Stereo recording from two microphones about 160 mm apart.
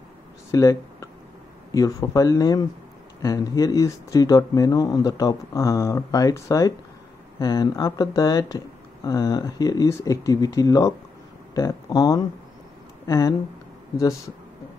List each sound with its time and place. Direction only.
0.5 s speech: 20° left (ahead or behind)